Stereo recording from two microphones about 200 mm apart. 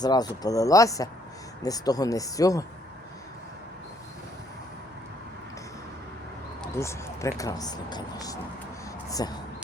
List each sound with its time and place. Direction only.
0.0 s speech: 20° left (ahead or behind)
6.7 s speech: 15° left (ahead or behind)